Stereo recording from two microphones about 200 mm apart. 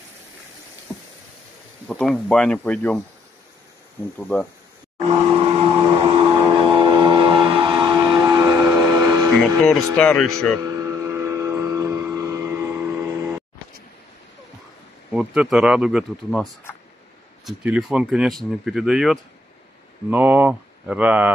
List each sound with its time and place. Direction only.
1.9 s speech: 5° left (ahead or behind)
4.9 s vehicle: 30° right (ahead or behind)
5.8 s a sound: 15° right (ahead or behind)
6.7 s vehicle: 25° right (ahead or behind)
7.4 s train: 25° right (ahead or behind)
8.2 s vehicle: 15° right (ahead or behind)
8.5 s train: 5° right (ahead or behind)
8.8 s vehicle: 20° right (ahead or behind)
9.6 s speech: centre (ahead or behind)
10.6 s vehicle: 15° right (ahead or behind)
15.1 s speech: 5° right (ahead or behind)